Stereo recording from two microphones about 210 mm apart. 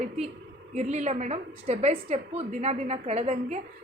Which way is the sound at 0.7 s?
35° right (ahead or behind).